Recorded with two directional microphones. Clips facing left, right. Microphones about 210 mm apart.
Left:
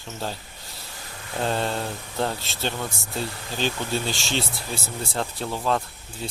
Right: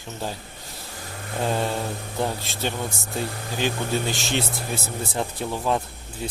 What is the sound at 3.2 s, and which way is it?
Speech, 50° right (ahead or behind).